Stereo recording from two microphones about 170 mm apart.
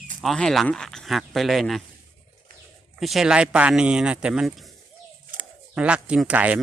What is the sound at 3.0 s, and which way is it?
Speech, centre (ahead or behind).